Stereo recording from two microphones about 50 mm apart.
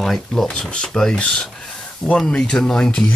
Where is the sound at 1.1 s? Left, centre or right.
Centre.